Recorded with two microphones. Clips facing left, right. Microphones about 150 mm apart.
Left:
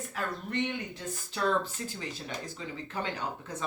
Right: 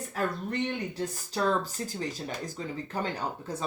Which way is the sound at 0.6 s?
40° right (ahead or behind).